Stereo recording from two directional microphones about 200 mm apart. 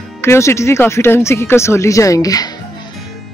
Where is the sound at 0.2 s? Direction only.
15° left (ahead or behind).